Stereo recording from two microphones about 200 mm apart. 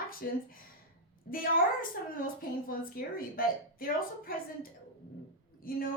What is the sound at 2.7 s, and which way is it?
A woman's voice, 45° left (ahead or behind).